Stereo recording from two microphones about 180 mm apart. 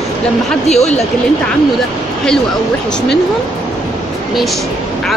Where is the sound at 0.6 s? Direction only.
35° left (ahead or behind).